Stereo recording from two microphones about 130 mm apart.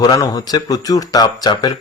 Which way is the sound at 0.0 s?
30° left (ahead or behind).